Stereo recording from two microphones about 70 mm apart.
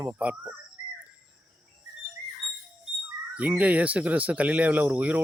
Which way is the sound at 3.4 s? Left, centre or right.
Right.